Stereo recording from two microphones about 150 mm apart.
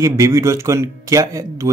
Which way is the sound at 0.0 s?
20° right (ahead or behind).